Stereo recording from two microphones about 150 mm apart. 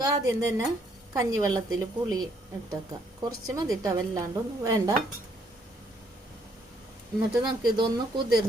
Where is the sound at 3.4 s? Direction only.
25° right (ahead or behind).